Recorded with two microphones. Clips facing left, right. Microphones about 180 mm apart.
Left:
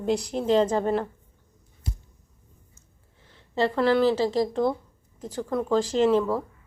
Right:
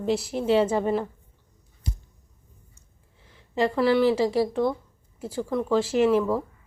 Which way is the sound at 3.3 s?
10° right (ahead or behind).